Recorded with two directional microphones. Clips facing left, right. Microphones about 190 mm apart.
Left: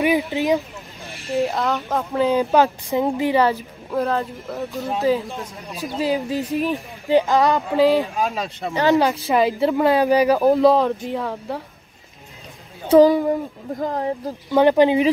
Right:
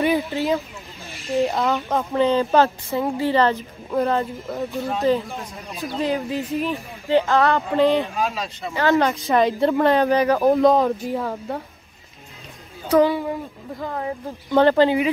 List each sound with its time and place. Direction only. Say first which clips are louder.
0.0 s speech: left 1 dB; 15° left (ahead or behind)
1.3 s speech: right 1 dB; centre (ahead or behind)
7.8 s speech: left 2 dB; centre (ahead or behind)
8.3 s speech: left 3 dB; 55° left (ahead or behind)
8.7 s speech: left 2 dB; 15° left (ahead or behind)
9.3 s speech: right 1 dB; 5° left (ahead or behind)
12.8 s speech: left 5 dB; 25° left (ahead or behind)
13.1 s speech: left 6 dB; 45° left (ahead or behind)
14.5 s speech: left 1 dB; 15° left (ahead or behind)